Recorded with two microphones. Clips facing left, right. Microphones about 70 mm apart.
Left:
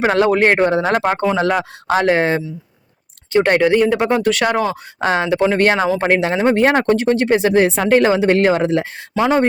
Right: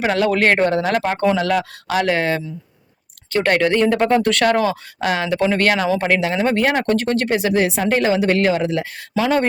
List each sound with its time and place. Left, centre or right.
0.0 s speech: left
0.3 s speech: centre
0.8 s speech: left; by 4.8 s centre
4.9 s speech: left
5.3 s speech: centre
7.3 s speech: left